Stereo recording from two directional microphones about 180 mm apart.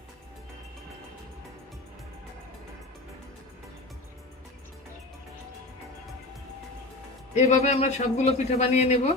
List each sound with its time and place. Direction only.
7.3 s a man's voice: 40° left (ahead or behind)